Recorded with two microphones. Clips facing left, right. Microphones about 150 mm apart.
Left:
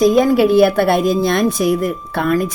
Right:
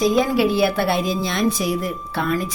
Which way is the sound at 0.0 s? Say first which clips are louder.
Left 6 dB; 50° left (ahead or behind).